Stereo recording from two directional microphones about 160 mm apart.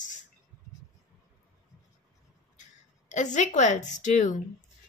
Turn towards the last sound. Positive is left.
turn(degrees=50)  # may be behind; listen again after turning